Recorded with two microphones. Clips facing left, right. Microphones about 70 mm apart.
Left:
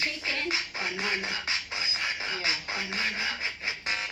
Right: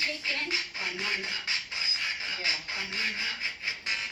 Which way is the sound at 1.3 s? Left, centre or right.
Left.